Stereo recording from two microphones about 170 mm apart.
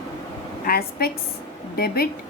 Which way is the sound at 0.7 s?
65° left (ahead or behind).